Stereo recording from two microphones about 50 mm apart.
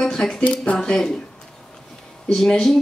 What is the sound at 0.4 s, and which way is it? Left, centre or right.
Speech, left.